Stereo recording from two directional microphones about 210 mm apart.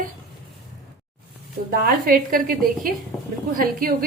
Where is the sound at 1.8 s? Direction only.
45° right (ahead or behind).